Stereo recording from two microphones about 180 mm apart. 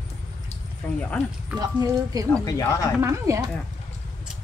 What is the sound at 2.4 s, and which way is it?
Speech, 20° left (ahead or behind).